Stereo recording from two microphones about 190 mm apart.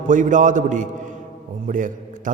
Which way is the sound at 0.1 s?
40° right (ahead or behind).